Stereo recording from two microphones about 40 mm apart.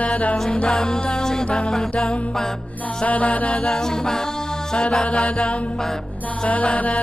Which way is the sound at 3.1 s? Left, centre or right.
Left.